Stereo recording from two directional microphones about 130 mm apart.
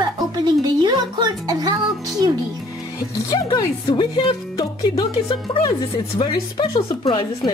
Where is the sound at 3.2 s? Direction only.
35° left (ahead or behind).